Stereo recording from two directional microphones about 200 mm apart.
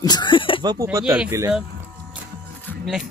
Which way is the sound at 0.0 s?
20° left (ahead or behind).